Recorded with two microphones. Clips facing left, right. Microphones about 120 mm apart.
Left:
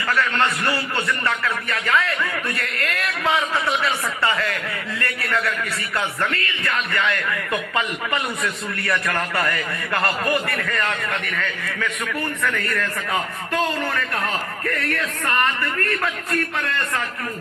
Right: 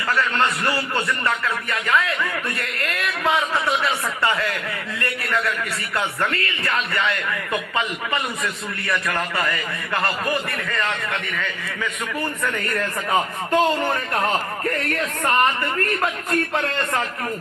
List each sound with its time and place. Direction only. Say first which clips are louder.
1.7 s a man's voice: even; centre (ahead or behind)
3.2 s a man's voice: right 1 dB; centre (ahead or behind)
6.3 s a man's voice: right 1 dB; 25° right (ahead or behind)
7.5 s a man's voice: even; centre (ahead or behind)
12.4 s a man's voice: even; 25° right (ahead or behind)